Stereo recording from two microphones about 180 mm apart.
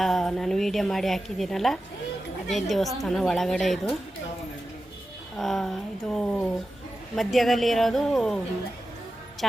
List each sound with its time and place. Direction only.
0.0 s a woman's voice: centre (ahead or behind)
5.4 s a woman's voice: centre (ahead or behind)
9.4 s a woman's voice: centre (ahead or behind)